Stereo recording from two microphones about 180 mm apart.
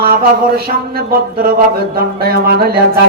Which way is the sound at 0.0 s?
60° right (ahead or behind).